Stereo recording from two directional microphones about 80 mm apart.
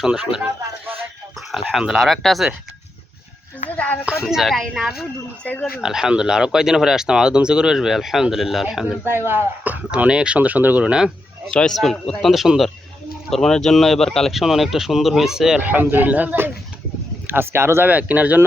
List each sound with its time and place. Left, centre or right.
0.0 s speech: centre
2.0 s speech: centre
3.7 s a sound: centre
4.0 s speech: centre
5.4 s speech: centre
5.8 s speech: centre
9.0 s speech: right
9.9 s speech: centre
11.5 s speech: centre
15.6 s speech: right
17.8 s speech: centre